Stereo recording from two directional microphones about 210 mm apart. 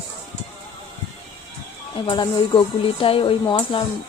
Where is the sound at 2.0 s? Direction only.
20° left (ahead or behind).